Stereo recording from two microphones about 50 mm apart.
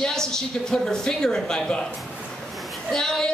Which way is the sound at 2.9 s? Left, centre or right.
Centre.